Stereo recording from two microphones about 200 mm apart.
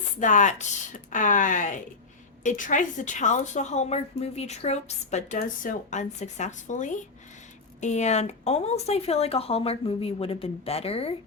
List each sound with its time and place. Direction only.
0.2 s a woman's voice: 40° left (ahead or behind)